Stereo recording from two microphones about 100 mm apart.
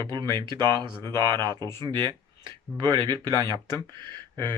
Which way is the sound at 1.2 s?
45° right (ahead or behind).